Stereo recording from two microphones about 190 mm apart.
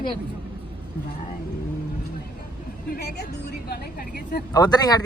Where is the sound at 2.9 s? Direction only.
55° left (ahead or behind).